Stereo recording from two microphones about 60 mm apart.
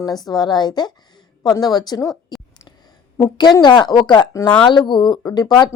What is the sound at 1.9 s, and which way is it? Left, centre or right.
Speech, left.